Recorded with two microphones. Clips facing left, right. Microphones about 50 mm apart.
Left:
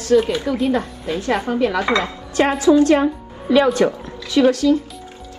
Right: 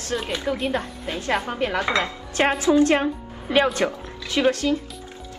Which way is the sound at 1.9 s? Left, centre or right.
Right.